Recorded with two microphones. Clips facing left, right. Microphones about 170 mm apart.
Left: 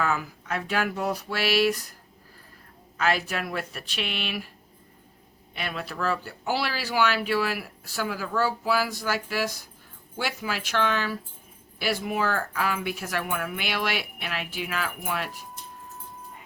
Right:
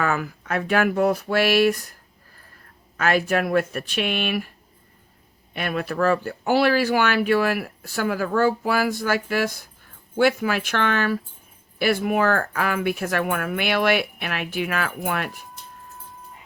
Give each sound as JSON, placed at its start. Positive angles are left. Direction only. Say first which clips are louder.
{"t": 0.0, "sound": "speech", "louder": "right 3 dB", "side_deg": -55}
{"t": 3.0, "sound": "speech", "louder": "right 6 dB", "side_deg": -50}
{"t": 5.5, "sound": "speech", "louder": "right 8 dB", "side_deg": -50}